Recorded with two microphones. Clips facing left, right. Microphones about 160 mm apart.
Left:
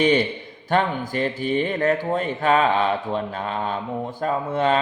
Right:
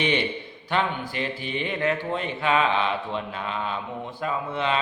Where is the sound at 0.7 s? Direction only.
45° left (ahead or behind).